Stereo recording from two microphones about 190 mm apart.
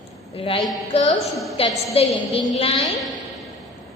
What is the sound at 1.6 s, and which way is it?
A woman's voice, 30° left (ahead or behind).